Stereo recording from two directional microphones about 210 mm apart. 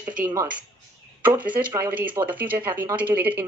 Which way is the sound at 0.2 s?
15° right (ahead or behind).